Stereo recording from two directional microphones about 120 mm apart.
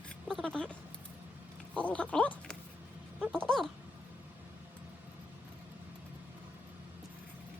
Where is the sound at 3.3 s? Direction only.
5° left (ahead or behind).